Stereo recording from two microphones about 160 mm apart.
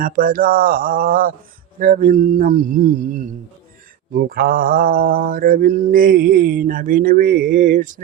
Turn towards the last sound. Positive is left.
turn(degrees=-55)  # may be behind; listen again after turning